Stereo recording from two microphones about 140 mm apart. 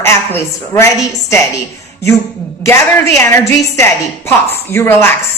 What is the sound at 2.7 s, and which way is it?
A woman's voice, 20° left (ahead or behind).